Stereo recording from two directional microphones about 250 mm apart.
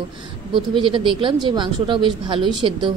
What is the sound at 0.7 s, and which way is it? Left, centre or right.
Speech, centre.